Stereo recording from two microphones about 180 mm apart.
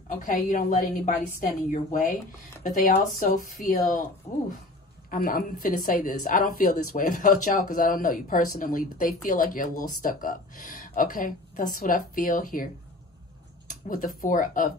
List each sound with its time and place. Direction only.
0.2 s a woman's voice: 45° left (ahead or behind)
5.1 s a woman's voice: 50° left (ahead or behind)
13.7 s speech: 45° left (ahead or behind)